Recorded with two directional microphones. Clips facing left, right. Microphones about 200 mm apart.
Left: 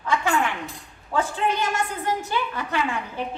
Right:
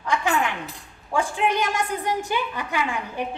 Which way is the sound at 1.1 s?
15° right (ahead or behind).